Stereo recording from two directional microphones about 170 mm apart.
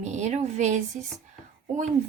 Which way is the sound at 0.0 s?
45° right (ahead or behind).